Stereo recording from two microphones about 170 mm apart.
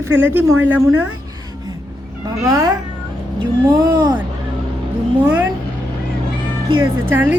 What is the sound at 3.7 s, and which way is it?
Speech, 25° right (ahead or behind).